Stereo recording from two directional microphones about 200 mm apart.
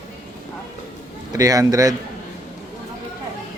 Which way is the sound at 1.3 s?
15° right (ahead or behind).